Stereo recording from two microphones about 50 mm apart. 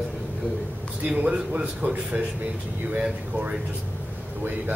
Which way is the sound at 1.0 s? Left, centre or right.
Right.